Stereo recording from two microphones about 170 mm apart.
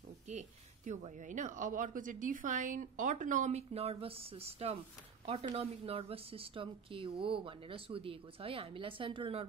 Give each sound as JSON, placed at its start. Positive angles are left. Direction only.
{"t": 0.3, "sound": "speech", "side_deg": -45}